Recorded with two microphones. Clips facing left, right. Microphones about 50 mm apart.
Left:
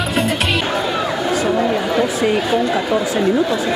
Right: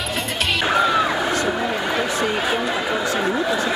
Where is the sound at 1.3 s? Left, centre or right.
Centre.